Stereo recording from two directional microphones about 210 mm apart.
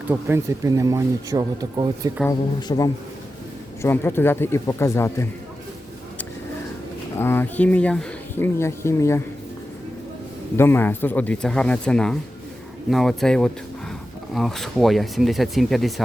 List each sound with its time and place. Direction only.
0.1 s speech: 10° right (ahead or behind)
2.6 s a man's voice: 20° left (ahead or behind)
7.2 s speech: 10° left (ahead or behind)
10.6 s speech: 10° left (ahead or behind)